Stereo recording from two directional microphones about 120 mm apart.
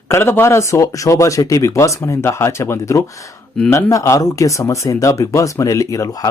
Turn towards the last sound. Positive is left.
turn(degrees=30)  # may be behind; listen again after turning